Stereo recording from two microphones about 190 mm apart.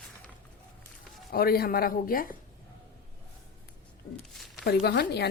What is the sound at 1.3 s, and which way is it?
Speech, 55° left (ahead or behind).